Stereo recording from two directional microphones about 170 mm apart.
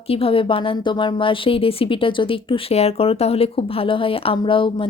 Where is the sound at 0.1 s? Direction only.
35° left (ahead or behind).